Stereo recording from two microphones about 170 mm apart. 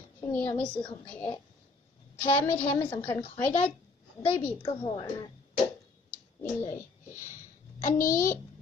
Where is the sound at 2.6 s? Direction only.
30° left (ahead or behind).